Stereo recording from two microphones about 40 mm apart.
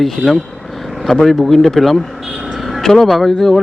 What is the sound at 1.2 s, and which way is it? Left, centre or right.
Speech, centre.